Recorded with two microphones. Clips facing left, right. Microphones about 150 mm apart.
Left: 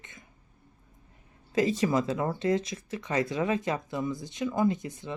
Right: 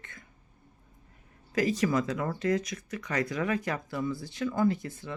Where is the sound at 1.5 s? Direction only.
25° left (ahead or behind).